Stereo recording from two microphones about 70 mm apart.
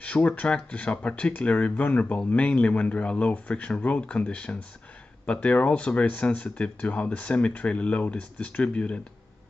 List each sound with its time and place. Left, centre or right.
0.0 s speech: left